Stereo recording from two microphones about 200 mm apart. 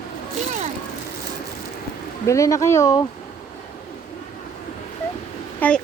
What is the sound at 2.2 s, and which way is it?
Speech, 15° left (ahead or behind).